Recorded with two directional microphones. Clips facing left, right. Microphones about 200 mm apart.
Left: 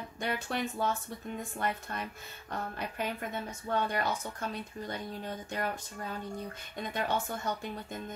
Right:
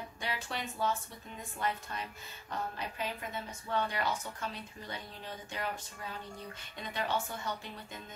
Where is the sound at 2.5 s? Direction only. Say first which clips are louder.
Left 1 dB; 55° left (ahead or behind).